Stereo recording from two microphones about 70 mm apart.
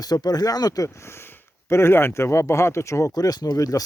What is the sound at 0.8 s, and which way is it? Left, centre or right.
Speech, left.